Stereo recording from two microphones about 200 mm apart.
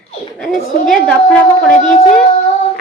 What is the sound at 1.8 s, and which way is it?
Speech, 35° left (ahead or behind).